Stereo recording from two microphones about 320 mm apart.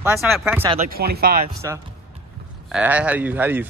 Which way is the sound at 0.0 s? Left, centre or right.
Centre.